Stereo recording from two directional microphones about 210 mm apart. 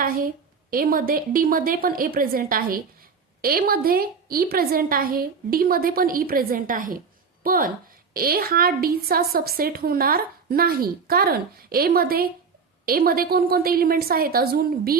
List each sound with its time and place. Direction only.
0.7 s a woman's voice: 45° right (ahead or behind)